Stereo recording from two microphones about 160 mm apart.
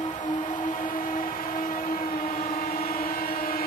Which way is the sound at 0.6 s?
55° left (ahead or behind).